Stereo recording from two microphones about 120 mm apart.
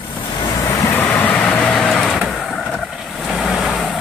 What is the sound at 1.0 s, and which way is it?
Vehicle, 15° left (ahead or behind).